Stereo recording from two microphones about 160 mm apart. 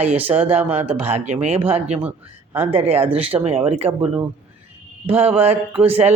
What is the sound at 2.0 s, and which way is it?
Speech, 10° right (ahead or behind).